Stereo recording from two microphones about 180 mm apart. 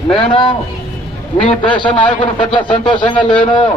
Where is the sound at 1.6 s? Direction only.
25° left (ahead or behind).